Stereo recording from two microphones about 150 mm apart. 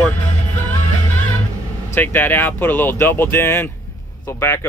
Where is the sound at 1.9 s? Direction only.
15° left (ahead or behind).